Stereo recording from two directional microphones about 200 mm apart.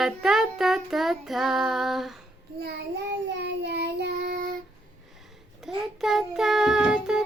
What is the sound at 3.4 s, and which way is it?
Child singing, 60° right (ahead or behind).